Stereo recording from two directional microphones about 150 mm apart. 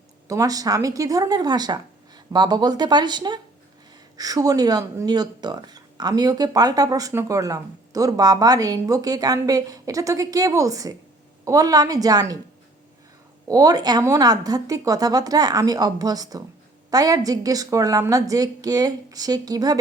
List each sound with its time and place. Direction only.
0.3 s speech: 25° right (ahead or behind)
13.5 s speech: 25° right (ahead or behind)